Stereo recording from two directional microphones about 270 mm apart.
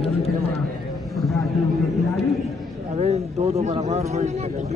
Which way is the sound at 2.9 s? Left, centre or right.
Right.